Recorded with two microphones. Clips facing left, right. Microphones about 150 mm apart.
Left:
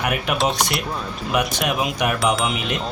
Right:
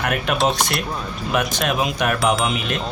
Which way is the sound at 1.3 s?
15° left (ahead or behind).